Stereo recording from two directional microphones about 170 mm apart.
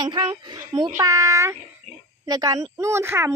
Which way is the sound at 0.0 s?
25° right (ahead or behind).